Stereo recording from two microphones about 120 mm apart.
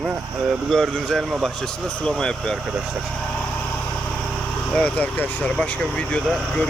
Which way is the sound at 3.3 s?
15° left (ahead or behind).